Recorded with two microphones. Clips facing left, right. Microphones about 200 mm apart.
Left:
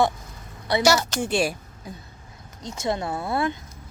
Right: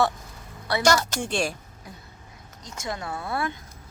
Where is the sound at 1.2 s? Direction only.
10° left (ahead or behind).